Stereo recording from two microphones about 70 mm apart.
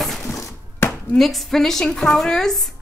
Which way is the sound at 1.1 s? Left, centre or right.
Centre.